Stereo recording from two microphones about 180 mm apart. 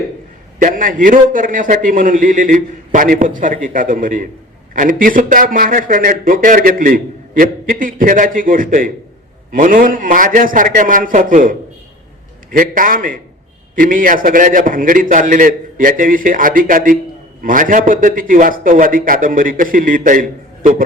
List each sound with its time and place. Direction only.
0.6 s a man's voice: 50° right (ahead or behind)